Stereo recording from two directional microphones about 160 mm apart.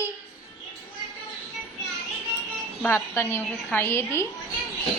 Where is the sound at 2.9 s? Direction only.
15° left (ahead or behind).